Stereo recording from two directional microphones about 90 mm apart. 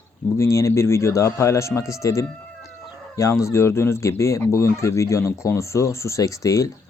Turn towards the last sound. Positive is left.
turn(degrees=35)  # may be behind; listen again after turning